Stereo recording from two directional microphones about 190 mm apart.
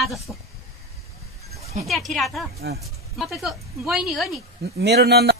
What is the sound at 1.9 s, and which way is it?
Speech, centre (ahead or behind).